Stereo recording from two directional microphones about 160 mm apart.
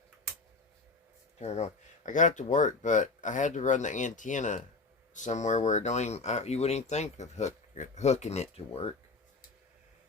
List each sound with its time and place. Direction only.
1.4 s speech: 45° left (ahead or behind)